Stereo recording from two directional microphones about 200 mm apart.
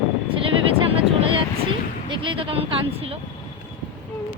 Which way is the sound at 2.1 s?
25° right (ahead or behind).